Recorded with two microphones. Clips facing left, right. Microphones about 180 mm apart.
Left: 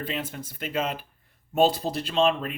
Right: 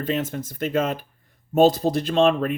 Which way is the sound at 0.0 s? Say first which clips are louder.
Right 7 dB; 45° right (ahead or behind).